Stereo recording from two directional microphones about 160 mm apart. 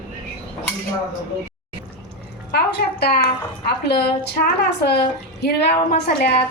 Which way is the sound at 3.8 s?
90° left.